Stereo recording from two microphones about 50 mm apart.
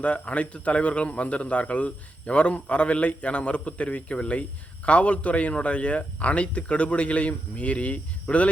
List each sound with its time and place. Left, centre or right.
0.0 s a man's voice: left